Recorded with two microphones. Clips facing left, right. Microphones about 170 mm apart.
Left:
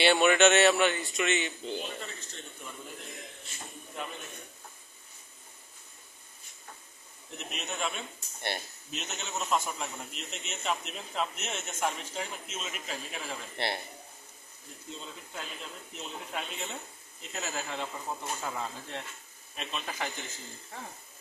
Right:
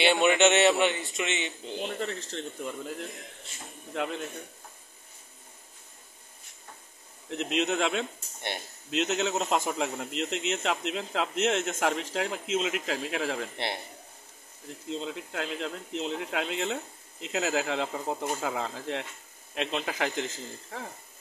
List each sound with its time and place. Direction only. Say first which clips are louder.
0.0 s a man's voice: even; 20° right (ahead or behind)
1.8 s speech: right 7 dB; 75° right (ahead or behind)
3.9 s a man's voice: right 9 dB; 80° right
7.2 s a man's voice: right 12 dB; 90° right
14.9 s a man's voice: right 10 dB; 90° right